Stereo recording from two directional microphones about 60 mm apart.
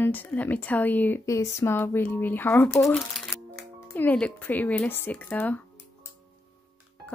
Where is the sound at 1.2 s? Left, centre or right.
Left.